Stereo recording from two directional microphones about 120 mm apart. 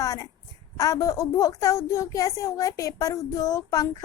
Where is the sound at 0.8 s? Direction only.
30° left (ahead or behind).